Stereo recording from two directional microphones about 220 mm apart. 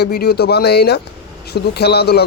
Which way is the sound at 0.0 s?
45° left (ahead or behind).